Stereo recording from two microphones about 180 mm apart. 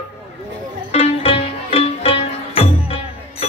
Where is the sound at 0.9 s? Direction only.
35° left (ahead or behind).